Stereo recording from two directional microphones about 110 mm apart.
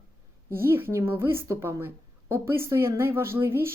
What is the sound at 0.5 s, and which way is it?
A woman's voice, 20° right (ahead or behind).